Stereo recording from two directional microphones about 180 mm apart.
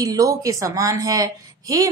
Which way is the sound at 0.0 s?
20° right (ahead or behind).